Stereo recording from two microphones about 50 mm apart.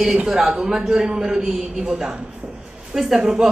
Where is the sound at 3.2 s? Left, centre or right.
Centre.